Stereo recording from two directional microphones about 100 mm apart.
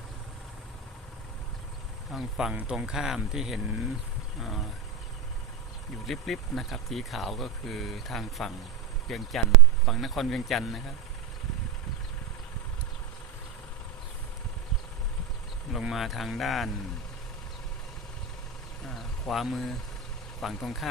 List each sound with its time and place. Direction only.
2.0 s speech: centre (ahead or behind)
6.1 s speech: centre (ahead or behind)
15.7 s speech: centre (ahead or behind)
18.9 s speech: centre (ahead or behind)